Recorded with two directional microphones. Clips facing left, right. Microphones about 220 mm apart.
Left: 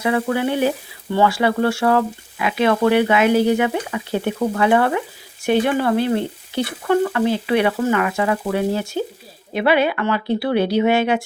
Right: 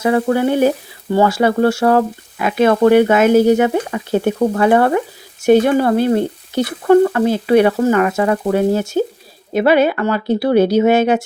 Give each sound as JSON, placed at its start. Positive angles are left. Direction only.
{"t": 0.0, "sound": "speech", "side_deg": -45}